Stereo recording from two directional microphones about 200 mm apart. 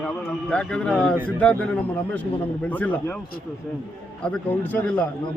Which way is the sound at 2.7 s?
10° left (ahead or behind).